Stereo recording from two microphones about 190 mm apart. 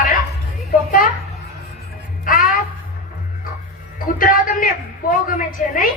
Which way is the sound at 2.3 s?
45° left (ahead or behind).